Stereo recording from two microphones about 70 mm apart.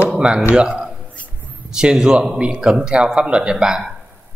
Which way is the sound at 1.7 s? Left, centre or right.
Centre.